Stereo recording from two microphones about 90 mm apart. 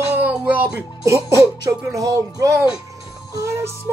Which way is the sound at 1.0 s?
35° right (ahead or behind).